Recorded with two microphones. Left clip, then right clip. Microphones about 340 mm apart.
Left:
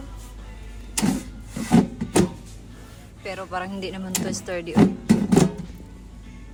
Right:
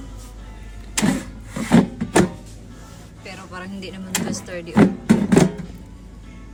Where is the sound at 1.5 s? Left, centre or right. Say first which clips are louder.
Right 3 dB; centre.